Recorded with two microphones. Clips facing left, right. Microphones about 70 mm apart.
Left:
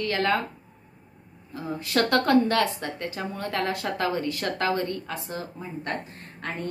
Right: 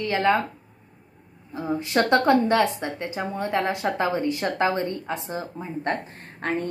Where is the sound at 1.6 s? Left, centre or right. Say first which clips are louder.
Right 3 dB; right.